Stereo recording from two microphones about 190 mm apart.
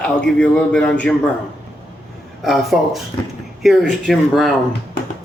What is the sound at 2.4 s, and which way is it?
Speech, centre (ahead or behind).